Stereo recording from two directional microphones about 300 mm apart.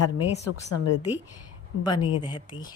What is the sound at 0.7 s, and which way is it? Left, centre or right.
Speech, left.